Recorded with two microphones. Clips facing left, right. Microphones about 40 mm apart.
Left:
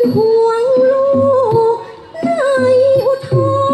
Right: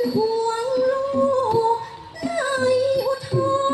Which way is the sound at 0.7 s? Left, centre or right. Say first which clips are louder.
Left 8 dB; left.